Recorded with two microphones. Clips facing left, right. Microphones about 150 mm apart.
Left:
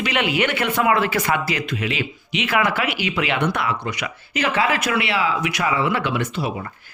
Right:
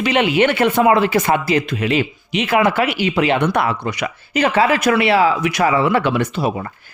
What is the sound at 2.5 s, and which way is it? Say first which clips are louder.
Speech: right 5 dB; 25° right (ahead or behind).